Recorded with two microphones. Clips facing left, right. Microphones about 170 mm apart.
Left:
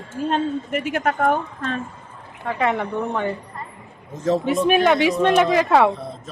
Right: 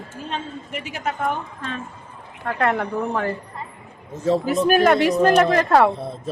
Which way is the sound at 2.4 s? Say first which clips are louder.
Even; centre (ahead or behind).